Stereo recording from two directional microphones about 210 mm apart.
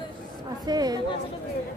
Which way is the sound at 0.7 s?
20° right (ahead or behind).